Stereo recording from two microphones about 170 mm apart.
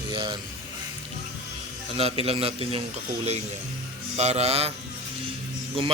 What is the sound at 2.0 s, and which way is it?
Mantra, 35° right (ahead or behind).